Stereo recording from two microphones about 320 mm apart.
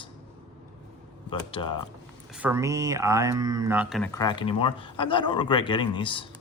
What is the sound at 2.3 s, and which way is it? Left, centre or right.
Speech, centre.